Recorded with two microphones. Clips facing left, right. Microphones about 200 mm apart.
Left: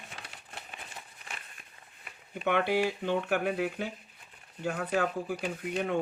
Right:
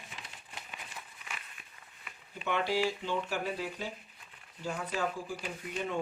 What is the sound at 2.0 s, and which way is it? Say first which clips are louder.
Speech: left 8 dB; 50° left (ahead or behind).